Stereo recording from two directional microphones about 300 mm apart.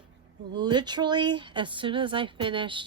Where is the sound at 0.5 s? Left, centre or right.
Centre.